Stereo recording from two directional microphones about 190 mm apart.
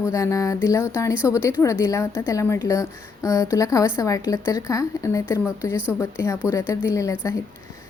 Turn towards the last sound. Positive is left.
turn(degrees=15)  # may be behind; listen again after turning